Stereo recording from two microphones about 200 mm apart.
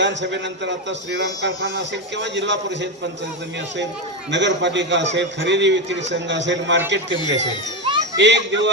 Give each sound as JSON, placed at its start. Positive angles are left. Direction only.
{"t": 0.0, "sound": "a man's voice", "side_deg": -60}
{"t": 4.3, "sound": "a man's voice", "side_deg": -60}